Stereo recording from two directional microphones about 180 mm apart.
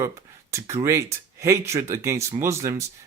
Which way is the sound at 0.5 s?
15° right (ahead or behind).